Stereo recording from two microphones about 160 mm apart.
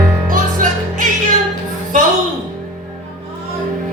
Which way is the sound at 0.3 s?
55° right (ahead or behind).